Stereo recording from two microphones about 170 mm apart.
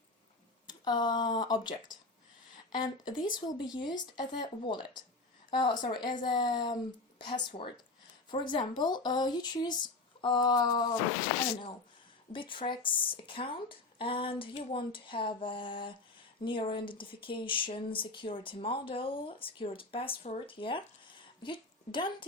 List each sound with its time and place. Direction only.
0.7 s speech: 25° left (ahead or behind)
12.3 s speech: 30° left (ahead or behind)